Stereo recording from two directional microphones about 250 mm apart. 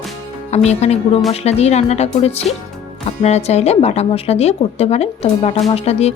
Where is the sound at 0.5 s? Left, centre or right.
Left.